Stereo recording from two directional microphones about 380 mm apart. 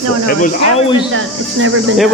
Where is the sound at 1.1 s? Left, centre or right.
Right.